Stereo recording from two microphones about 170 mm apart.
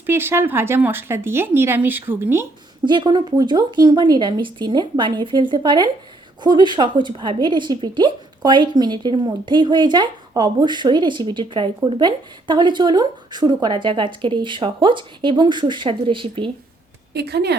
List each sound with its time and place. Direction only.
0.0 s speech: 15° right (ahead or behind)
2.8 s a woman's voice: 25° right (ahead or behind)
17.2 s speech: 75° right (ahead or behind)